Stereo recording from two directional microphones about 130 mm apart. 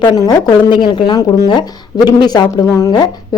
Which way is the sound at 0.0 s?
35° left (ahead or behind).